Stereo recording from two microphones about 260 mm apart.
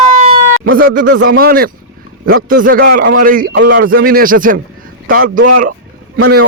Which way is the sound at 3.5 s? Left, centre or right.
Right.